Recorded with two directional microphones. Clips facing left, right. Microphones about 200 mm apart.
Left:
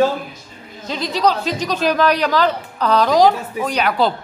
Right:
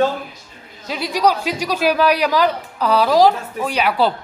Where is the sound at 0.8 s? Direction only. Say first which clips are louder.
Even; 10° right (ahead or behind).